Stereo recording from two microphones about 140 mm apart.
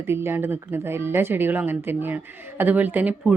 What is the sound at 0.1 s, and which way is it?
A woman's voice, 15° right (ahead or behind).